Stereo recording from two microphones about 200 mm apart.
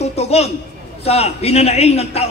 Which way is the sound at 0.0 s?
30° left (ahead or behind).